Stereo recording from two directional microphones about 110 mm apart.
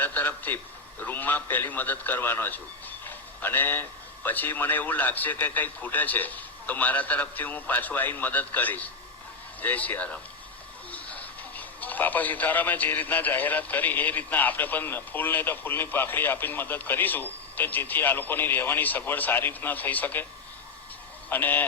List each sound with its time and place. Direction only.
0.0 s speech: 15° left (ahead or behind)
21.2 s speech: 15° left (ahead or behind)